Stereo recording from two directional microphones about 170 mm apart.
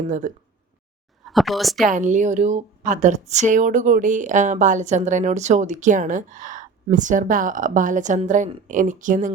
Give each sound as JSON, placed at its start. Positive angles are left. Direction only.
{"t": 0.1, "sound": "speech", "side_deg": -50}
{"t": 1.2, "sound": "speech", "side_deg": 0}
{"t": 1.9, "sound": "speech", "side_deg": -45}